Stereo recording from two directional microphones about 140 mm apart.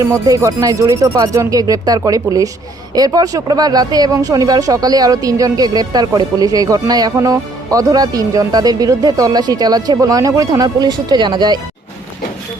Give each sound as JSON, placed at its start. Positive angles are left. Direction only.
{"t": 0.0, "sound": "speech", "side_deg": -20}